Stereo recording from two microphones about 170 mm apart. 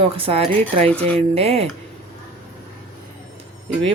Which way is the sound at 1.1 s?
35° right (ahead or behind).